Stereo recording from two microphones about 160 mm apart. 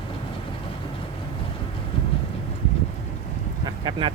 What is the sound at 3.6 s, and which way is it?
Vehicle, 30° right (ahead or behind).